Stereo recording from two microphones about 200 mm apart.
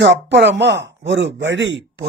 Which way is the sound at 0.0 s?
60° right (ahead or behind).